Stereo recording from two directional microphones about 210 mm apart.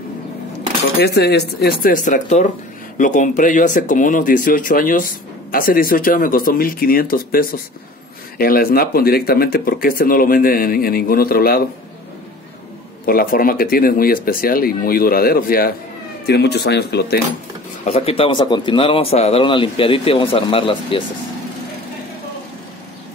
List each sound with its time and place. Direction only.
1.0 s speech: 50° left (ahead or behind)
13.0 s speech: 45° left (ahead or behind)
17.8 s speech: 30° left (ahead or behind)